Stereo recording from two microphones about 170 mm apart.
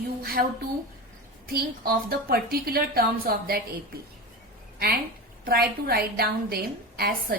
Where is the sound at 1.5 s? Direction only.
65° right (ahead or behind).